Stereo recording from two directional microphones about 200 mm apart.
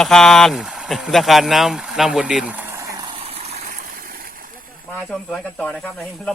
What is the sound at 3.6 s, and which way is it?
Stream, 45° right (ahead or behind).